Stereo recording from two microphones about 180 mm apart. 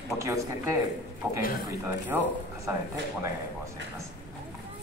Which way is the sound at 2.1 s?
10° right (ahead or behind).